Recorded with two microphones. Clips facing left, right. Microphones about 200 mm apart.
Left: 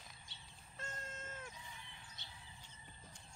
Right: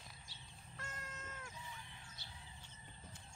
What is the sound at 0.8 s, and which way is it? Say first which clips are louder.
Cat: left 2 dB; 25° left (ahead or behind).